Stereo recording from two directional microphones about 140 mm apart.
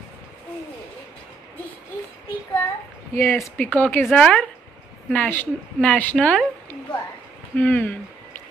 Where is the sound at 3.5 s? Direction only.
10° left (ahead or behind).